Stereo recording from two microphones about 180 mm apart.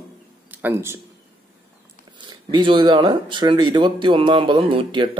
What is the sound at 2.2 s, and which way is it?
Speech, 25° right (ahead or behind).